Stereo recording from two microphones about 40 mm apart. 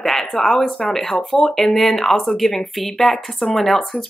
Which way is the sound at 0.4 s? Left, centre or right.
Centre.